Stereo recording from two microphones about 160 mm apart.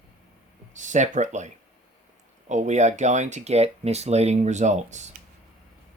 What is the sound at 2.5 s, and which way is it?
Speech, 45° right (ahead or behind).